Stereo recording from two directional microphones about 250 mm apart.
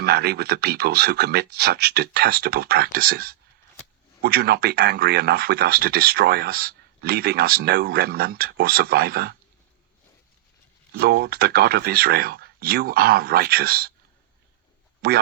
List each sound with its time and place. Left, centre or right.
0.0 s speech: right
10.9 s speech: right
15.0 s speech: right